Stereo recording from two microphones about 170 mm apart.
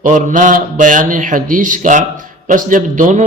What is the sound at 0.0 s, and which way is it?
A man's voice, 50° right (ahead or behind).